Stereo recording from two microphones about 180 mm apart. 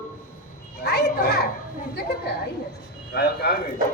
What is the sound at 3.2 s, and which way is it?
Speech, 60° left (ahead or behind).